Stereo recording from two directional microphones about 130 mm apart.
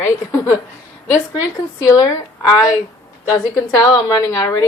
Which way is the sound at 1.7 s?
30° left (ahead or behind).